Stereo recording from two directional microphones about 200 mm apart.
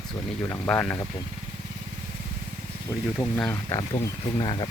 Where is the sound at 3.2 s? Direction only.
10° left (ahead or behind).